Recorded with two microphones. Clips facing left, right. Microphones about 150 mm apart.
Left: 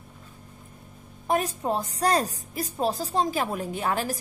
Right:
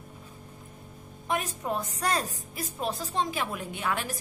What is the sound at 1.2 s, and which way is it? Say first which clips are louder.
A woman's voice: left 5 dB; 35° left (ahead or behind).